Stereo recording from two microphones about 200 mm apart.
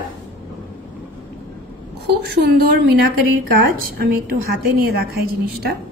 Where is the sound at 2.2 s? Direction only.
50° right (ahead or behind).